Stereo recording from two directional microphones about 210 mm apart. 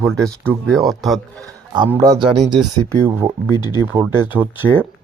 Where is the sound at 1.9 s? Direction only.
15° right (ahead or behind).